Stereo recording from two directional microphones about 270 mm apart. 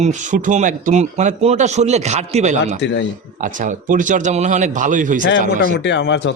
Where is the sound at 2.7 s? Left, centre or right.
Left.